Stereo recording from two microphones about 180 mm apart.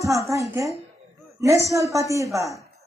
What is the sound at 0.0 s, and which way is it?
A man's voice, 15° right (ahead or behind).